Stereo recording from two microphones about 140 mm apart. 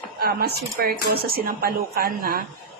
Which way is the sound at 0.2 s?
90° right.